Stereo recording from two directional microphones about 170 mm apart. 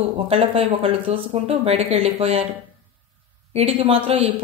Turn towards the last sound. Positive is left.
turn(degrees=-35)  # may be behind; listen again after turning